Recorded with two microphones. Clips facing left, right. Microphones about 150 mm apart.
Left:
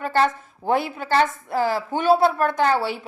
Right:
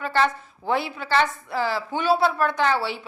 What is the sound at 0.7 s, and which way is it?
A woman's voice, 50° left (ahead or behind).